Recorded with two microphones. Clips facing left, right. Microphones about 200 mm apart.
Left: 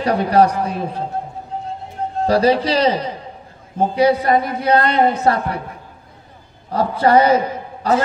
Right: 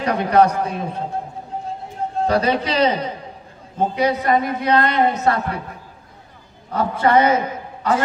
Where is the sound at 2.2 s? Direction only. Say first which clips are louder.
Left 4 dB; 35° left (ahead or behind).